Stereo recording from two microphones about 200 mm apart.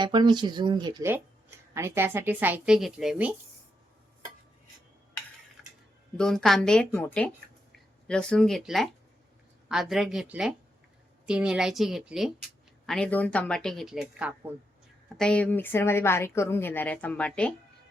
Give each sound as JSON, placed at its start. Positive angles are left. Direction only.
{"t": 0.0, "sound": "a woman's voice", "side_deg": -20}
{"t": 6.1, "sound": "a woman's voice", "side_deg": 0}
{"t": 15.2, "sound": "a woman's voice", "side_deg": 5}